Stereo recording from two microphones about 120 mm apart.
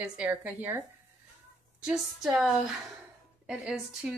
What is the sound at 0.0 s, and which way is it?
Speech, 15° right (ahead or behind).